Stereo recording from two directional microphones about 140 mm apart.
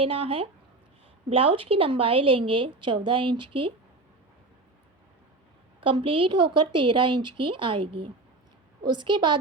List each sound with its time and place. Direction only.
0.0 s a woman's voice: 40° right (ahead or behind)
5.8 s a woman's voice: 40° right (ahead or behind)